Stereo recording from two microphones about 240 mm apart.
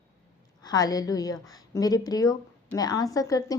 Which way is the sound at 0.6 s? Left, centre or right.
Centre.